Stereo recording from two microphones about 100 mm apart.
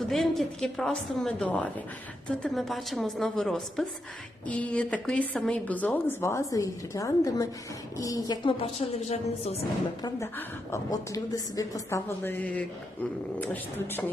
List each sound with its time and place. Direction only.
0.1 s a woman's voice: centre (ahead or behind); by 8.4 s 35° left (ahead or behind)
8.4 s a woman's voice: 75° left (ahead or behind)
10.9 s a woman's voice: 35° left (ahead or behind); by 14.0 s 20° left (ahead or behind)